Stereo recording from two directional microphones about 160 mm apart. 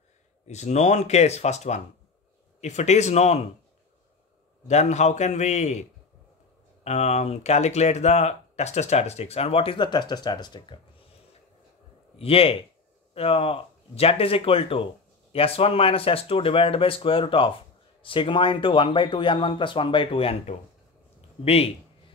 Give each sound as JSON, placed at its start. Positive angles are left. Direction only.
{"t": 0.5, "sound": "speech", "side_deg": 45}
{"t": 4.6, "sound": "speech", "side_deg": 45}
{"t": 12.2, "sound": "speech", "side_deg": 35}